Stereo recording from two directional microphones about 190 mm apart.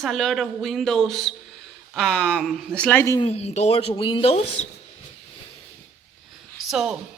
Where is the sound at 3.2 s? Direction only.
35° left (ahead or behind).